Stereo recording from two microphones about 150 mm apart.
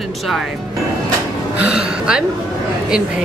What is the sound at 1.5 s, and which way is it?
Speech, 5° right (ahead or behind).